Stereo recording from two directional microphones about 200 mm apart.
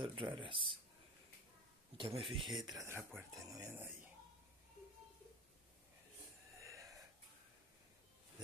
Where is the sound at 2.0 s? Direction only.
25° right (ahead or behind).